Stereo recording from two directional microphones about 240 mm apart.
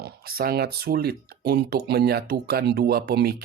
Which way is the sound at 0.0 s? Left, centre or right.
Right.